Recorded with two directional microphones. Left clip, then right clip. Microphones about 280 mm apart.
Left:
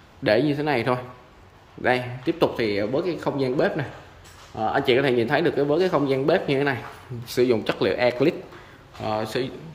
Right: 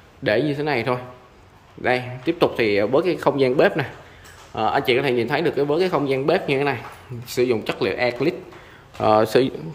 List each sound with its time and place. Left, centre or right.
0.2 s a man's voice: centre
9.0 s a man's voice: centre